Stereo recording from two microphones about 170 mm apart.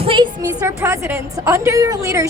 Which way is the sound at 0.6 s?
15° right (ahead or behind).